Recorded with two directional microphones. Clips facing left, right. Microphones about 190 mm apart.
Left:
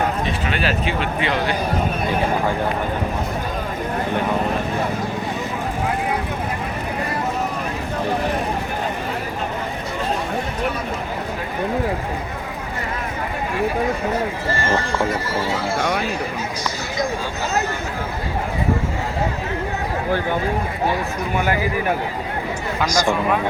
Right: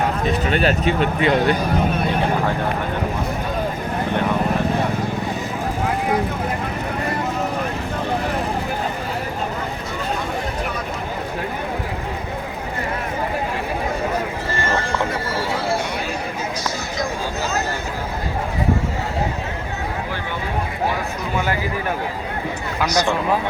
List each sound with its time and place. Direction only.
0.9 s speech: 40° right (ahead or behind)
22.9 s speech: 10° left (ahead or behind)